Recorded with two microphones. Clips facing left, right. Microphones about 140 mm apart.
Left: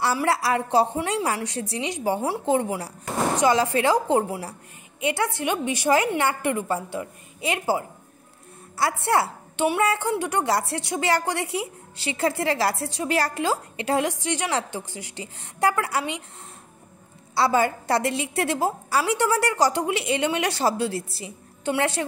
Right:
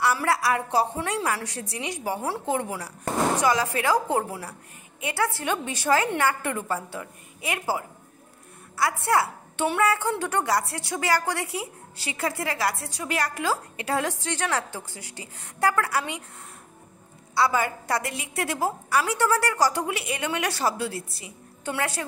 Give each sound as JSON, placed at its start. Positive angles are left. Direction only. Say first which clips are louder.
{"t": 0.0, "sound": "a woman's voice", "louder": "left 1 dB", "side_deg": 25}
{"t": 17.3, "sound": "a woman's voice", "louder": "left 3 dB", "side_deg": 30}